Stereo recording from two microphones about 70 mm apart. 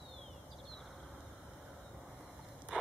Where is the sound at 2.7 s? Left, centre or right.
Centre.